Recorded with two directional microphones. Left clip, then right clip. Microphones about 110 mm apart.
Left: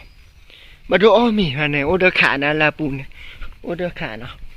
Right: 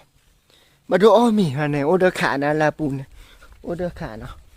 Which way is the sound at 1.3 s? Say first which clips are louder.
Left 3 dB; 35° right (ahead or behind).